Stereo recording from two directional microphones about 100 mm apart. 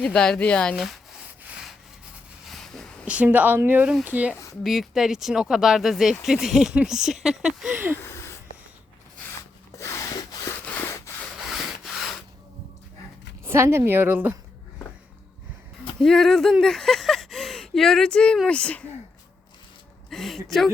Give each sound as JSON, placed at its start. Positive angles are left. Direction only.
{"t": 0.0, "sound": "speech", "side_deg": 10}
{"t": 0.8, "sound": "a sound", "side_deg": 0}
{"t": 2.5, "sound": "a sound", "side_deg": 5}
{"t": 3.1, "sound": "a woman's voice", "side_deg": -15}
{"t": 4.6, "sound": "speech", "side_deg": 0}
{"t": 7.7, "sound": "a woman's voice", "side_deg": -20}
{"t": 8.0, "sound": "a sound", "side_deg": 25}
{"t": 9.7, "sound": "wood", "side_deg": 30}
{"t": 10.2, "sound": "a sound", "side_deg": 40}
{"t": 11.3, "sound": "rub", "side_deg": 0}
{"t": 13.4, "sound": "a woman's voice", "side_deg": -25}
{"t": 16.0, "sound": "speech", "side_deg": 5}
{"t": 20.1, "sound": "speech", "side_deg": 0}